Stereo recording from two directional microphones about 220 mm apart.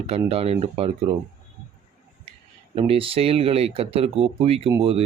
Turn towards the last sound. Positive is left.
turn(degrees=-25)  # may be behind; listen again after turning